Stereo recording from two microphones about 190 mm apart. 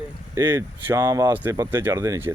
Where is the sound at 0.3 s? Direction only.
15° right (ahead or behind).